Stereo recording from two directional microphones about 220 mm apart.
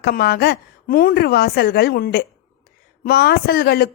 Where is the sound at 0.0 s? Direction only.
45° left (ahead or behind).